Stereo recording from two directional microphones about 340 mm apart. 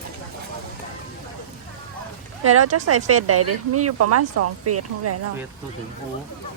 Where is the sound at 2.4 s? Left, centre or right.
Right.